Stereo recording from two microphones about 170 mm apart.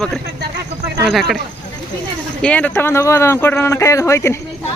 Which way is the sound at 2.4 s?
5° left (ahead or behind).